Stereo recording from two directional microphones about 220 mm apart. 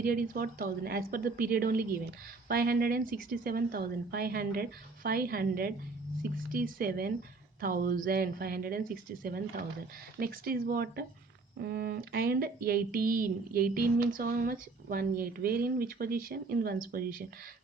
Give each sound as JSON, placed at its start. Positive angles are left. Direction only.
{"t": 0.0, "sound": "a woman's voice", "side_deg": -40}